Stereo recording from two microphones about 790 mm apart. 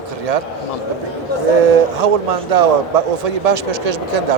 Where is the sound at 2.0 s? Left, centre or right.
Right.